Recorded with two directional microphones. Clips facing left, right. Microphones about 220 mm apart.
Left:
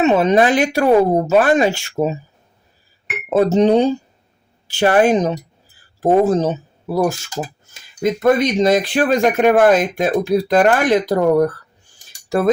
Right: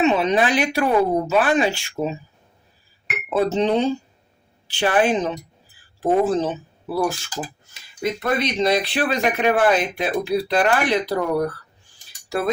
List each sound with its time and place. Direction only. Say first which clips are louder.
0.0 s speech: left 5 dB; 45° left (ahead or behind)
3.2 s speech: left 6 dB; 45° left (ahead or behind)